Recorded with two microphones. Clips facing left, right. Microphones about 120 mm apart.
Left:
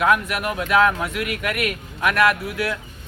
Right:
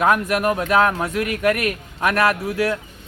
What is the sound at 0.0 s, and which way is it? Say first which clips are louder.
A man's voice: right 2 dB; 40° right (ahead or behind).